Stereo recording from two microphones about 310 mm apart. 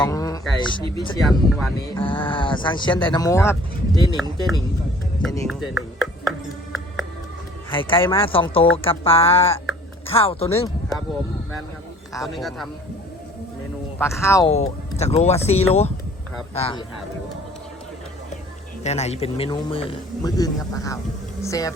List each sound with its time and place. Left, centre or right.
0.0 s a sound: centre
1.2 s speech: centre
2.0 s a man's voice: centre
5.2 s speech: centre
7.7 s a man's voice: centre
12.2 s speech: centre
14.0 s a man's voice: centre
14.5 s speech: left
18.8 s a man's voice: left